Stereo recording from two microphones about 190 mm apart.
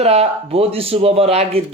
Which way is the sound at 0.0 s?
35° right (ahead or behind).